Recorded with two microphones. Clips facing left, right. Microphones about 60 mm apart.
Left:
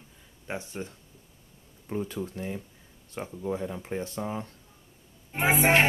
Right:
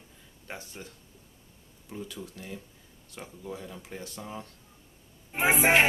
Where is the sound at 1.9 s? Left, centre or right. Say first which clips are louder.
Left 8 dB; left.